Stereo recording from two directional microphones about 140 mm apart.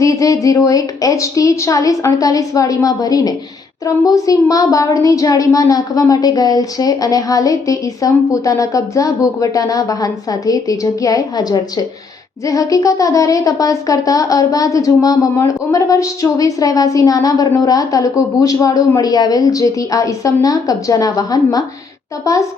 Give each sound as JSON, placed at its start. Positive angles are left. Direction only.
{"t": 0.0, "sound": "a woman's voice", "side_deg": 25}